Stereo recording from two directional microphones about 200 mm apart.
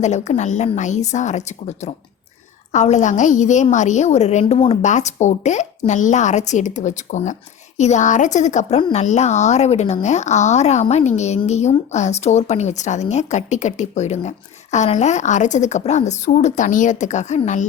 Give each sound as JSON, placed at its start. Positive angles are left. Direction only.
{"t": 0.0, "sound": "a woman's voice", "side_deg": 35}